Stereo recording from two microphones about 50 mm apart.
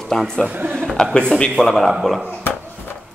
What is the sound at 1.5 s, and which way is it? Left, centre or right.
Speech, centre.